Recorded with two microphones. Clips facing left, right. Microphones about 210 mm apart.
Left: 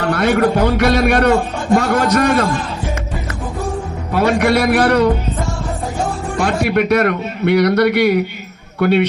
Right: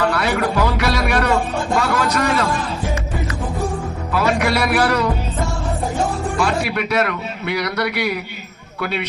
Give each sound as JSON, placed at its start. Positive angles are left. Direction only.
{"t": 0.1, "sound": "a man's voice", "side_deg": 50}
{"t": 4.4, "sound": "a man's voice", "side_deg": 50}
{"t": 6.4, "sound": "a man's voice", "side_deg": 50}